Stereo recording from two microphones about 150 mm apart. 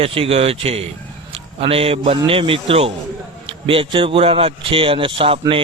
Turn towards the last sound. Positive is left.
turn(degrees=-35)  # may be behind; listen again after turning